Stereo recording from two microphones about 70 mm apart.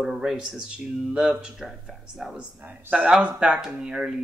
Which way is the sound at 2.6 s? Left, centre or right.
Right.